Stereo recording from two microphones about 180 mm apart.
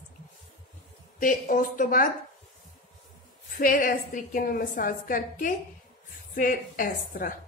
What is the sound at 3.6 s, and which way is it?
A woman's voice, 50° left (ahead or behind).